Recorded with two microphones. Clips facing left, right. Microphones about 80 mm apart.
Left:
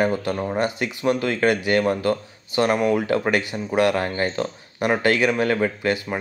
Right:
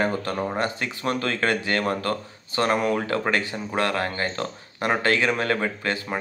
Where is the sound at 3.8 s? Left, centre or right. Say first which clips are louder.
Left 5 dB; centre.